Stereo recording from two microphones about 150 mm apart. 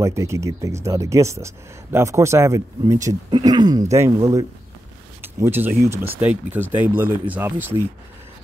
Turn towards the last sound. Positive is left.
turn(degrees=-15)  # may be behind; listen again after turning